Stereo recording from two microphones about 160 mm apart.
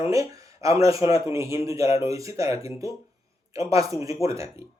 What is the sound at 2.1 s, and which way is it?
Speech, 20° right (ahead or behind).